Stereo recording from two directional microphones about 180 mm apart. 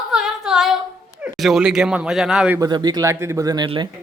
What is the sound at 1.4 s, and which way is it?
A man's voice, centre (ahead or behind).